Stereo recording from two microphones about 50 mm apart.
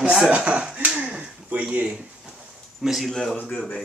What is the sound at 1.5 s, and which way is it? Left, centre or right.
Speech, right.